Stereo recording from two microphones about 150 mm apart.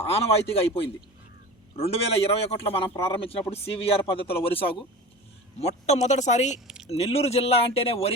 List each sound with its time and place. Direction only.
0.1 s a man's voice: 40° left (ahead or behind)